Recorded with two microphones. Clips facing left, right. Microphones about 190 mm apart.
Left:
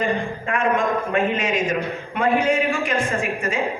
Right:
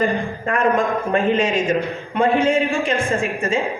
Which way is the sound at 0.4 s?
40° right (ahead or behind).